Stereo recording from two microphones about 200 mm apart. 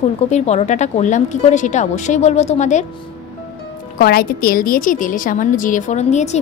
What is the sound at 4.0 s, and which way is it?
Speech, 50° left (ahead or behind).